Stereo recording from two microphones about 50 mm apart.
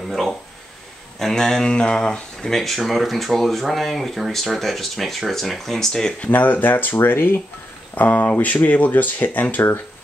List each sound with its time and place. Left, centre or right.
1.3 s speech: centre
6.1 s speech: left